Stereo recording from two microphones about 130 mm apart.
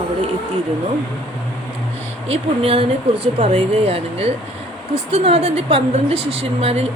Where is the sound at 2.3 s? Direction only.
45° right (ahead or behind).